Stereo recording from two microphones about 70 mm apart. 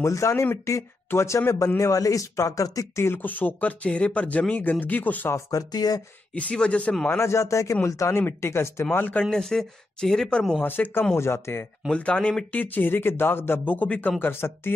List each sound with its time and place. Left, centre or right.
0.0 s speech: left
3.0 s speech: left
5.5 s speech: left
6.3 s speech: centre
7.1 s speech: left
8.9 s speech: left
9.3 s speech: centre
10.6 s speech: left
11.9 s speech: centre
12.6 s speech: left
14.2 s speech: left